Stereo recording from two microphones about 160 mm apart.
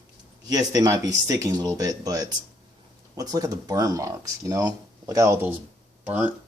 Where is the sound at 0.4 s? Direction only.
25° right (ahead or behind).